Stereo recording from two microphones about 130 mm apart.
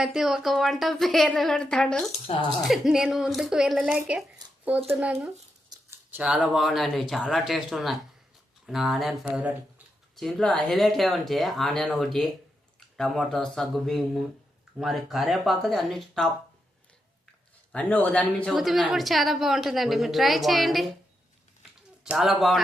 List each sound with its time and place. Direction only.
0.0 s a woman's voice: centre (ahead or behind)
2.3 s speech: 50° left (ahead or behind)
2.6 s a woman's voice: centre (ahead or behind)
10.2 s a woman's voice: centre (ahead or behind)
17.7 s a woman's voice: 10° left (ahead or behind)
21.6 s a sound: 5° right (ahead or behind)